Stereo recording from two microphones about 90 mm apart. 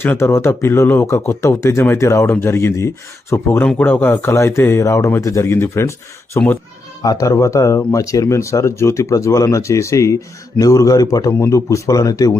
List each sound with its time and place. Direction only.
0.0 s speech: 25° left (ahead or behind)
4.3 s speech: 30° left (ahead or behind)
7.0 s speech: 45° left (ahead or behind)